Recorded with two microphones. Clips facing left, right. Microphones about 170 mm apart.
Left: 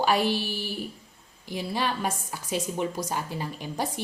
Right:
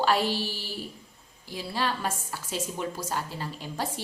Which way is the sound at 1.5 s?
15° left (ahead or behind).